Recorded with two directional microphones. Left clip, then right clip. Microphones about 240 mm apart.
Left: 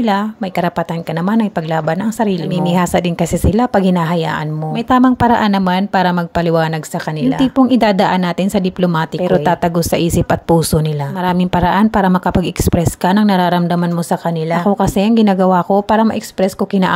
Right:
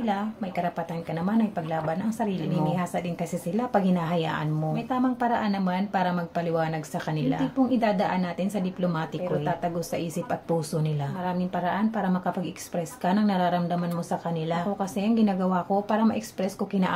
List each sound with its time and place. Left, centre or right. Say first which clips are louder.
0.0 s a woman's voice: left 13 dB; left
1.9 s a woman's voice: left 12 dB; left
11.2 s a woman's voice: left 14 dB; left